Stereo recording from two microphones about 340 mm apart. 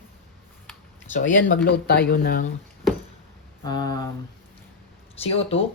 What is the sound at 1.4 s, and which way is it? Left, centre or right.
Speech, left.